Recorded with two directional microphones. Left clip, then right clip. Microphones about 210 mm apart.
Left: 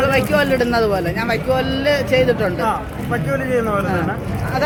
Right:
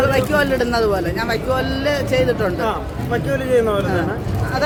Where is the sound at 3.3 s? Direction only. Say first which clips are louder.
Right 2 dB; 25° right (ahead or behind).